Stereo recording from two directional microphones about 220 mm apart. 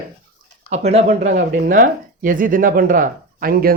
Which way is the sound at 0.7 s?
30° right (ahead or behind).